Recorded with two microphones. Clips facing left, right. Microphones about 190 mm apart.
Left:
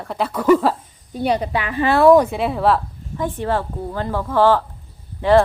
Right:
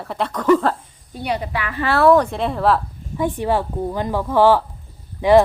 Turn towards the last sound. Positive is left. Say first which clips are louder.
# right 1 dB
turn(degrees=-15)  # may be behind; listen again after turning